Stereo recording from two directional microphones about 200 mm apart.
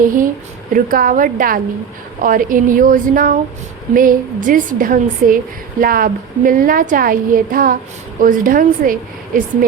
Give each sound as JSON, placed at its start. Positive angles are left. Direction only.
{"t": 0.0, "sound": "a woman's voice", "side_deg": -40}